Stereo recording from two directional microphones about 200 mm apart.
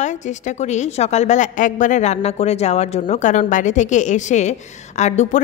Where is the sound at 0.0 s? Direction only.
35° left (ahead or behind).